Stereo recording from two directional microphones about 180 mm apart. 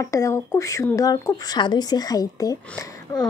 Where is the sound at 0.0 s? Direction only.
15° left (ahead or behind).